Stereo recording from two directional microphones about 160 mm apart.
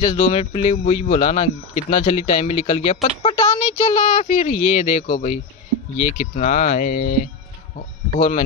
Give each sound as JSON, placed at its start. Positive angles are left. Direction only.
{"t": 0.0, "sound": "speech", "side_deg": 35}